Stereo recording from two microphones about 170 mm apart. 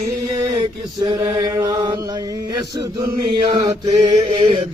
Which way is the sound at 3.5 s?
25° right (ahead or behind).